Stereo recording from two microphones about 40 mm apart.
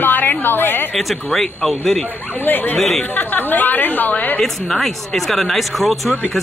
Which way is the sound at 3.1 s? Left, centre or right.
Left.